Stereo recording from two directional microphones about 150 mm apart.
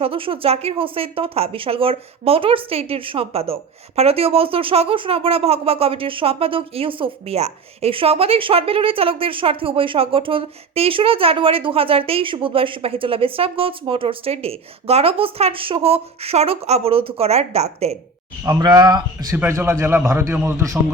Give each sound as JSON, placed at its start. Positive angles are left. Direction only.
{"t": 0.0, "sound": "speech", "side_deg": -40}
{"t": 18.4, "sound": "a man's voice", "side_deg": -25}